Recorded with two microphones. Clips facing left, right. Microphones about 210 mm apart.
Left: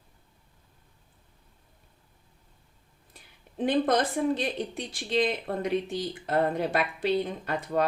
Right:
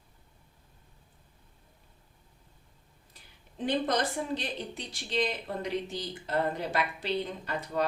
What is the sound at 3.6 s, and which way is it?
Speech, 55° left (ahead or behind).